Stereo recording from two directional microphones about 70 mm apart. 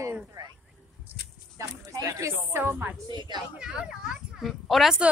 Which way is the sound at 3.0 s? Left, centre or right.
Right.